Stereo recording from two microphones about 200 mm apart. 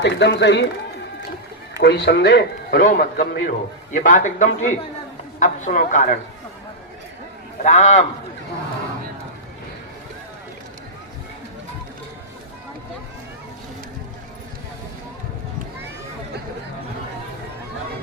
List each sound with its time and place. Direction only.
0.0 s a man's voice: 60° left (ahead or behind)
1.8 s a man's voice: 60° left (ahead or behind)
4.0 s speech: 40° left (ahead or behind)
7.6 s speech: 35° left (ahead or behind)